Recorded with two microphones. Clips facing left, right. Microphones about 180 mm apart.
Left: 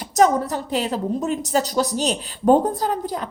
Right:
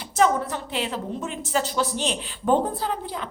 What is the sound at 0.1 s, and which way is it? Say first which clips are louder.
A woman's voice: left 4 dB; 40° left (ahead or behind).